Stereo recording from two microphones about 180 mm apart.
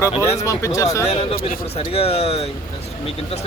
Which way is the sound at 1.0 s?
35° left (ahead or behind).